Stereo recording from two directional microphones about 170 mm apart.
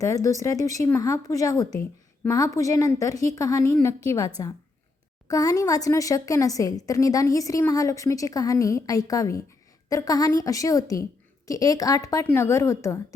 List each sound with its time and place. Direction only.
0.0 s a woman's voice: 20° left (ahead or behind)
5.3 s a woman's voice: 20° left (ahead or behind)